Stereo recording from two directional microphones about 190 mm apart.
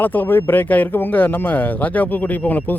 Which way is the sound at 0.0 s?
10° left (ahead or behind).